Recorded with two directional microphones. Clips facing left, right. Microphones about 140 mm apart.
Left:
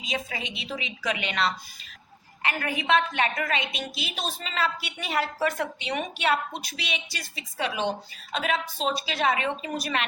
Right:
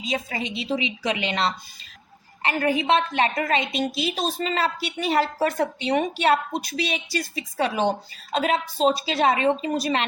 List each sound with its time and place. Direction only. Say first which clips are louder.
0.0 s a woman's voice: right 5 dB; 35° right (ahead or behind)